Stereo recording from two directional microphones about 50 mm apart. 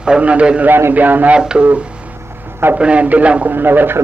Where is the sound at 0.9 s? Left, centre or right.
Right.